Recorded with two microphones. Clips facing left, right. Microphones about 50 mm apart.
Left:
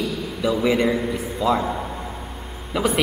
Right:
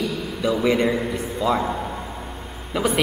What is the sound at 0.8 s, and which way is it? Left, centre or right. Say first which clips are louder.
Speech: even; centre.